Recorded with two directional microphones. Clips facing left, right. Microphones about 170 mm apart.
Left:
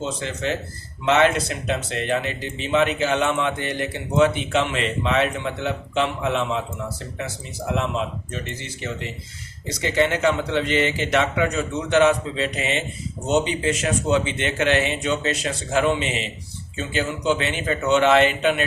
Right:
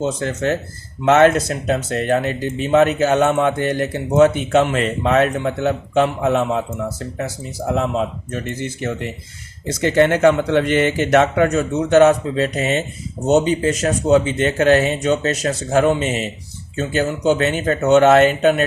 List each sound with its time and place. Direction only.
0.0 s speech: 45° right (ahead or behind)